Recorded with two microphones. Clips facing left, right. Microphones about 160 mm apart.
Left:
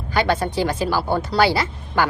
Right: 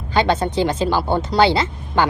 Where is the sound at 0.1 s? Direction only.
20° right (ahead or behind).